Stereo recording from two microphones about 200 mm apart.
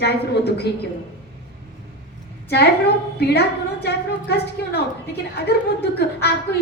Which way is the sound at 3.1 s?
55° left (ahead or behind).